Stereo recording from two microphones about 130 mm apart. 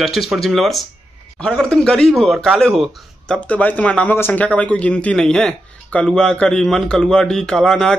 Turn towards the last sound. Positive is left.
turn(degrees=5)  # may be behind; listen again after turning